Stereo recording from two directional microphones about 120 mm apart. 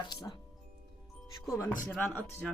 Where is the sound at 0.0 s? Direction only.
35° left (ahead or behind).